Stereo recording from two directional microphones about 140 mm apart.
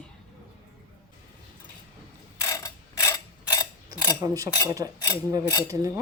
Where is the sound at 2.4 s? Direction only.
25° left (ahead or behind).